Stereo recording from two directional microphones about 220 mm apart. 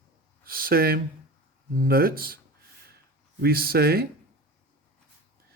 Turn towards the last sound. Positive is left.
turn(degrees=-45)  # may be behind; listen again after turning